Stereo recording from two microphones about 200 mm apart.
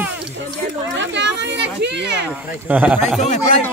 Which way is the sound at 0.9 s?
60° right (ahead or behind).